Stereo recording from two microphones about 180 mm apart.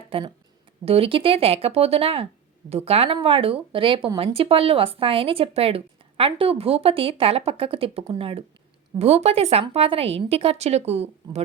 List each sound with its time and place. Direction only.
0.1 s speech: 30° right (ahead or behind)